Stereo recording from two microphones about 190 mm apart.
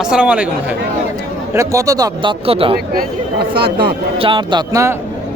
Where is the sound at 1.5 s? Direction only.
15° right (ahead or behind).